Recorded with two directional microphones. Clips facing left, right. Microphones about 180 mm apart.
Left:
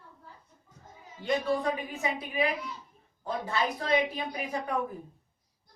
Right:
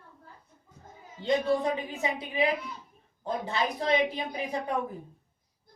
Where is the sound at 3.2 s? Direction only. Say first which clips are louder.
Right 1 dB; 20° right (ahead or behind).